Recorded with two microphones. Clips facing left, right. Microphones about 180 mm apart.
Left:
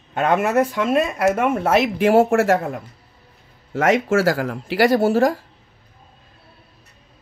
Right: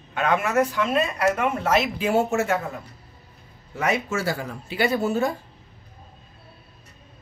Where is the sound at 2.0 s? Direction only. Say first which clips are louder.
Left 7 dB; 90° left.